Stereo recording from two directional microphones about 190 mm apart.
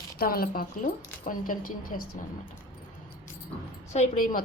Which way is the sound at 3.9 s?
45° left (ahead or behind).